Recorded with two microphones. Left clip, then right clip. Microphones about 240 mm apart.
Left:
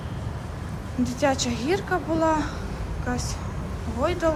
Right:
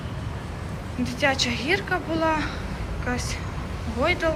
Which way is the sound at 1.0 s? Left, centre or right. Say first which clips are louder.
Right 1 dB; centre.